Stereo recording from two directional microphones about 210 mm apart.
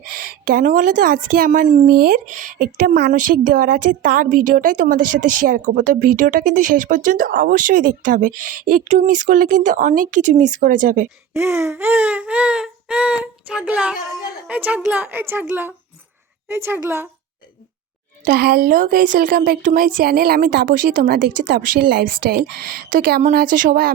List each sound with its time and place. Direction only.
0.0 s a woman's voice: 45° right (ahead or behind)
11.3 s a sound: 10° right (ahead or behind)
14.4 s a woman's voice: 5° right (ahead or behind)
18.3 s speech: 45° right (ahead or behind)